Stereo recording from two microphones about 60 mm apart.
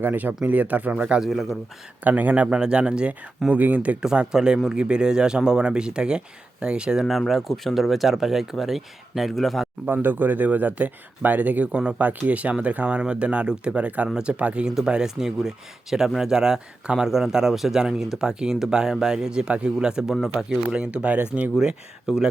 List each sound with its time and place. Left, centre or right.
0.0 s speech: right; by 1.2 s centre
1.2 s speech: centre
2.0 s speech: right
3.5 s speech: right
4.0 s speech: centre
7.0 s speech: centre
9.9 s speech: right
14.8 s speech: centre
21.6 s speech: centre